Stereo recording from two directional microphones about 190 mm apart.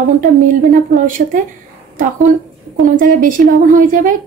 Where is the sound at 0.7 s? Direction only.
45° right (ahead or behind).